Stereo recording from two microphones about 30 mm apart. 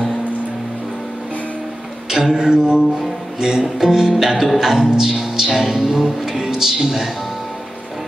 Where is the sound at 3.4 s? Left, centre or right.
Centre.